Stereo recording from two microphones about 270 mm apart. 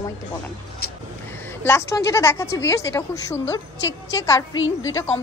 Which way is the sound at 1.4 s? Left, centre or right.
Centre.